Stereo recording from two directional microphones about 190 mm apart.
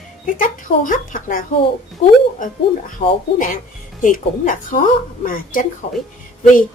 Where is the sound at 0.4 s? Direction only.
45° left (ahead or behind).